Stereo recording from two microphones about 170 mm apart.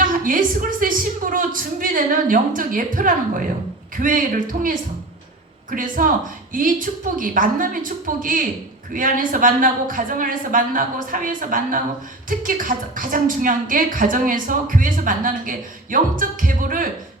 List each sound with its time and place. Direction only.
0.0 s a woman's voice: 50° right (ahead or behind)
5.7 s a woman's voice: 55° right (ahead or behind)